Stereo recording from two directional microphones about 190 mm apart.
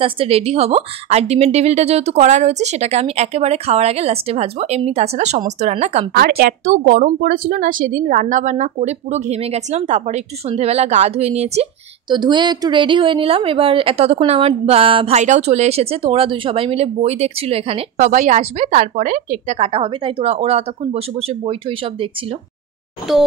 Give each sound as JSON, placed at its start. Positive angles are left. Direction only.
{"t": 0.0, "sound": "a woman's voice", "side_deg": -30}
{"t": 6.1, "sound": "a woman's voice", "side_deg": -55}
{"t": 12.1, "sound": "a woman's voice", "side_deg": -25}